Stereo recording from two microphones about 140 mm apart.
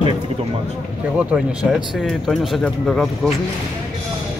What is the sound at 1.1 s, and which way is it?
Speech, 5° right (ahead or behind).